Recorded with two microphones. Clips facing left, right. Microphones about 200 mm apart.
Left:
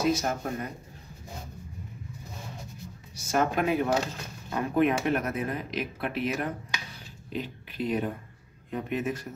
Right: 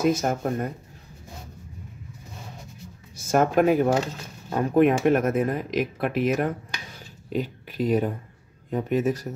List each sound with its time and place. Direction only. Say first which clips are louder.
0.0 s speech: right 4 dB; 50° right (ahead or behind)
3.3 s speech: right 6 dB; 45° right (ahead or behind)